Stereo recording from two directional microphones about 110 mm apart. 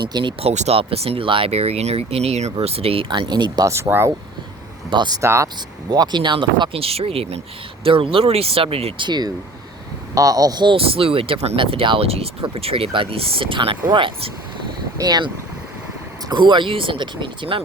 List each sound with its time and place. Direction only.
0.1 s speech: 45° right (ahead or behind)
0.4 s speech: 80° right
0.8 s speech: 60° right (ahead or behind); by 3.7 s 40° right (ahead or behind)
3.7 s speech: 20° right (ahead or behind)
4.9 s speech: 40° right (ahead or behind)
5.2 s speech: 25° right (ahead or behind)
5.9 s speech: 40° right (ahead or behind); by 7.4 s 65° right (ahead or behind)
7.9 s speech: 55° right (ahead or behind)
9.0 s speech: 40° right (ahead or behind)
10.8 s speech: 60° right (ahead or behind)
14.9 s speech: 40° right (ahead or behind)
16.3 s speech: 45° right (ahead or behind)